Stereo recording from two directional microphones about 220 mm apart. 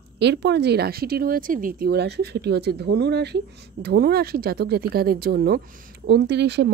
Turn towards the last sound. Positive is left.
turn(degrees=-50)  # may be behind; listen again after turning